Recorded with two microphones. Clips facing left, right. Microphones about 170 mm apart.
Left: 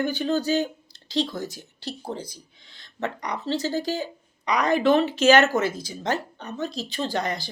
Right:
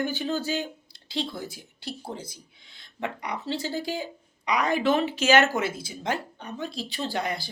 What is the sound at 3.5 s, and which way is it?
Speech, 40° left (ahead or behind).